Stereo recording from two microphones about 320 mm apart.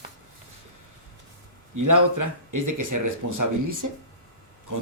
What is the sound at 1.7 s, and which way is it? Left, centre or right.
Speech, right.